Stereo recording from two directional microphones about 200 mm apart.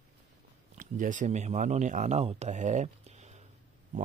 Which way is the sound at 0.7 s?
40° right (ahead or behind).